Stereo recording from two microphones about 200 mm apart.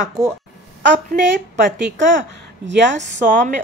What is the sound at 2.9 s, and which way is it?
Speech, 35° right (ahead or behind).